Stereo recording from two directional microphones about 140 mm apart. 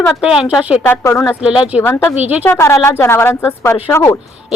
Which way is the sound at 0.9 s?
15° left (ahead or behind).